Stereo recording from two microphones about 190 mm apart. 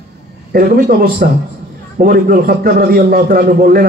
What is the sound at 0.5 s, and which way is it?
A man's voice, 50° right (ahead or behind).